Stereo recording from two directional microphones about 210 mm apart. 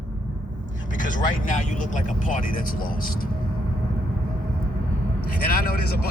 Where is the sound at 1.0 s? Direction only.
40° left (ahead or behind).